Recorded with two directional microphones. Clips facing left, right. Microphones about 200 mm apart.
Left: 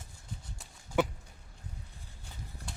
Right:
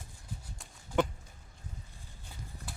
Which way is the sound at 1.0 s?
5° left (ahead or behind).